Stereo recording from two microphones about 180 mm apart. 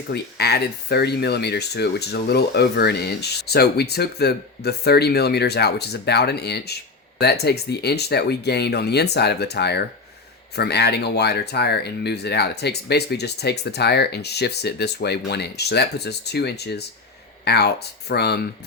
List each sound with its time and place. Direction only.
0.1 s speech: 65° left (ahead or behind)